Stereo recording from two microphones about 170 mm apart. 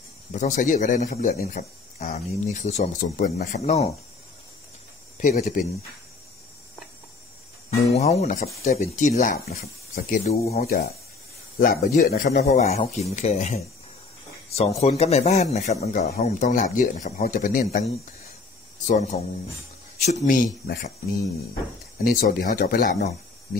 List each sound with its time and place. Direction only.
0.3 s speech: 45° left (ahead or behind); by 3.6 s 65° left (ahead or behind)
3.6 s a man's voice: 40° left (ahead or behind)
5.1 s speech: 40° left (ahead or behind)
7.9 s a man's voice: 40° left (ahead or behind)
11.6 s a man's voice: 50° left (ahead or behind)
18.9 s speech: 40° left (ahead or behind); by 23.0 s 60° left (ahead or behind)